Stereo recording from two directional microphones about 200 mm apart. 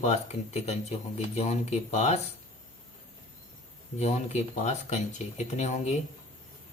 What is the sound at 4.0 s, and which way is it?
Speech, 35° left (ahead or behind).